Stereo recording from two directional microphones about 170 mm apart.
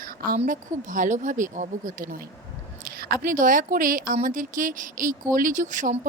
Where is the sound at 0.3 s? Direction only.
50° right (ahead or behind).